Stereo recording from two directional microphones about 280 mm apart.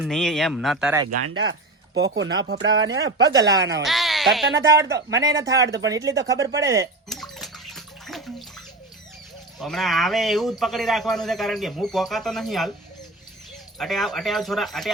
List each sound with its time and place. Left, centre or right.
0.0 s a man's voice: centre
1.2 s speech: right
3.2 s speech: centre
3.8 s speech: centre
4.9 s speech: right
5.4 s speech: centre
5.6 s speech: right
5.9 s speech: centre
7.1 s bathtub: centre
9.6 s a man's voice: centre
13.7 s a man's voice: centre